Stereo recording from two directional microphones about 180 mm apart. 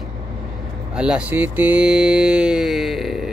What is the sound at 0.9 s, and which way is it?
Mantra, 5° right (ahead or behind).